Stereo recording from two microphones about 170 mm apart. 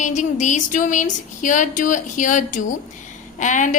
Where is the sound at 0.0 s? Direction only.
45° left (ahead or behind).